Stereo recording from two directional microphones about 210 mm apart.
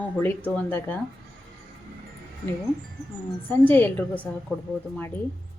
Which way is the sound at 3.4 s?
10° left (ahead or behind).